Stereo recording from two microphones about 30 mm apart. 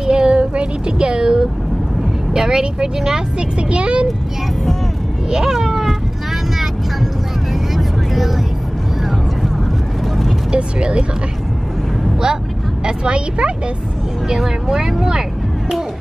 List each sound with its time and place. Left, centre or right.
0.0 s child singing: right
0.4 s music: right
2.3 s speech: centre
3.3 s speech: right
5.3 s speech: centre
7.7 s vehicle: centre
10.5 s speech: right
12.8 s speech: right
14.3 s speech: centre